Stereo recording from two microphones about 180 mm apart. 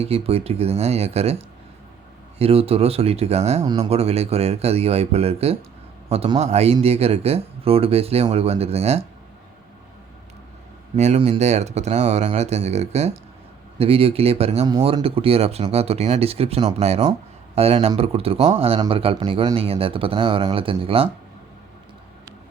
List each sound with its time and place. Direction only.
0.0 s speech: 35° right (ahead or behind)
2.4 s speech: 35° right (ahead or behind)
10.9 s speech: 40° right (ahead or behind)